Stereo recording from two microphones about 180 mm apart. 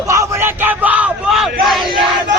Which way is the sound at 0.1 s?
15° right (ahead or behind).